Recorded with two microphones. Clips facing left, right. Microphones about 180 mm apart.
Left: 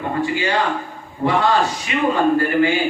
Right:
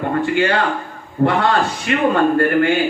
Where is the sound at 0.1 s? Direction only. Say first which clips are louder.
Right 3 dB; 60° right (ahead or behind).